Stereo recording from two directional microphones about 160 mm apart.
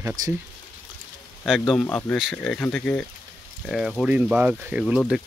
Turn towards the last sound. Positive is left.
turn(degrees=0)  # may be behind; listen again after turning